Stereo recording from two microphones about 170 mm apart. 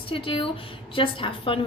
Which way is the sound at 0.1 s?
30° left (ahead or behind).